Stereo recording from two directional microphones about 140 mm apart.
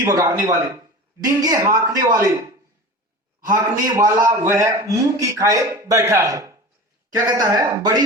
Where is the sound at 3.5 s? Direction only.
25° right (ahead or behind).